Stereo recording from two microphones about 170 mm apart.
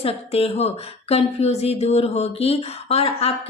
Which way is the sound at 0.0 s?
35° left (ahead or behind).